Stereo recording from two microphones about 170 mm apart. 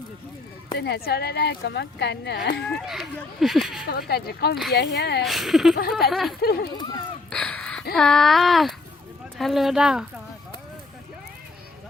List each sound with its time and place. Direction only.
0.8 s speech: 70° left (ahead or behind)
2.6 s speech: centre (ahead or behind)
3.8 s speech: 65° left (ahead or behind)
4.7 s speech: 85° left
5.2 s speech: centre (ahead or behind)
6.4 s speech: 65° left (ahead or behind)
7.3 s a sound: 5° left (ahead or behind)
7.9 s speech: 5° left (ahead or behind)